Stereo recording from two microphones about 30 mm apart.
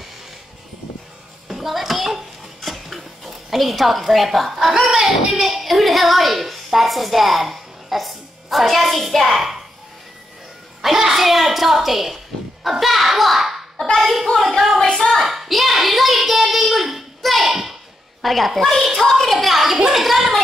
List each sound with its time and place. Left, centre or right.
1.5 s dishes: centre
4.9 s speech: right
5.4 s a woman's voice: centre
10.8 s a child's voice: centre
14.8 s music: left
15.2 s speech: centre
16.7 s child singing: centre
17.2 s a sound: centre
18.2 s speech: centre